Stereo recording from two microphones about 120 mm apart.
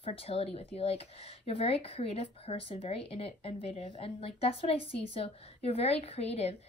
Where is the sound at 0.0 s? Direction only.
55° left (ahead or behind).